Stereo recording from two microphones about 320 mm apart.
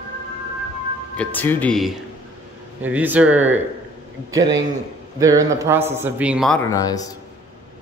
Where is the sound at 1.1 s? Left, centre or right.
Centre.